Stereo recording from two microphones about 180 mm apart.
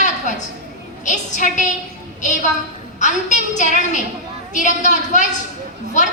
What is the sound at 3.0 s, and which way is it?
A woman's voice, 40° left (ahead or behind).